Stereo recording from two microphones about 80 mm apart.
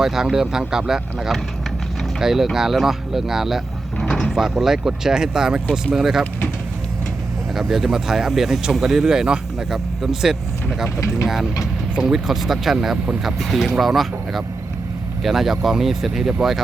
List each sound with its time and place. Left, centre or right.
0.0 s speech: centre
4.0 s door: centre
4.3 s speech: centre
7.5 s speech: centre
10.8 s speech: left
11.9 s speech: centre